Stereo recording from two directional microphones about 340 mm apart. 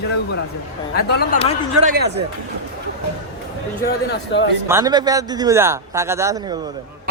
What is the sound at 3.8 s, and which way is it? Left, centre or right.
Speech, left.